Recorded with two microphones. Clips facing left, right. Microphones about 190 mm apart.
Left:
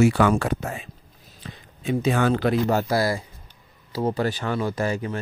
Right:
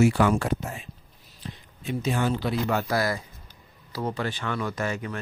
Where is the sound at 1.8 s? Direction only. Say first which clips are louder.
Left 5 dB; 80° left.